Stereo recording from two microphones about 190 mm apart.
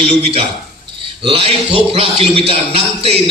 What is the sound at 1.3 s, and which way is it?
A man's voice, 30° right (ahead or behind).